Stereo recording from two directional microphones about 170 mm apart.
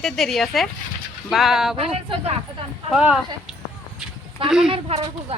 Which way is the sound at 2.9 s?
5° right (ahead or behind).